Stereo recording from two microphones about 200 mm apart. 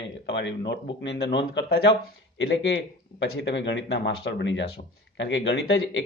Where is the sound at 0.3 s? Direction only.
65° left (ahead or behind).